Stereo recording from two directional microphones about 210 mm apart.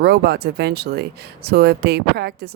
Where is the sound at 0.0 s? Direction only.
50° right (ahead or behind).